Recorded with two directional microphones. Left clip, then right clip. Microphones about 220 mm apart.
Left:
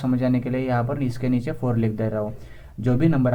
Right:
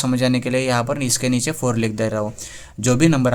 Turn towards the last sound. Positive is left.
turn(degrees=-30)  # may be behind; listen again after turning